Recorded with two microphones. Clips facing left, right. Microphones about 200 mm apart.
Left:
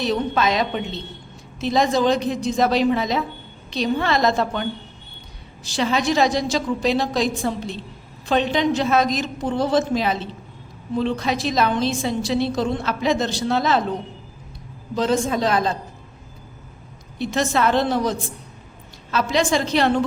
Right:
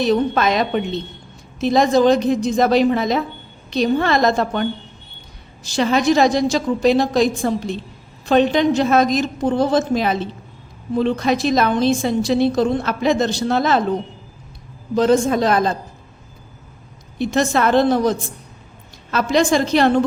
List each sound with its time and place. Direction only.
0.0 s a woman's voice: 50° right (ahead or behind)
1.6 s a woman's voice: 50° right (ahead or behind)
5.6 s a woman's voice: 50° right (ahead or behind)
14.9 s a woman's voice: 50° right (ahead or behind)
17.2 s a woman's voice: 50° right (ahead or behind)
19.1 s a woman's voice: 50° right (ahead or behind)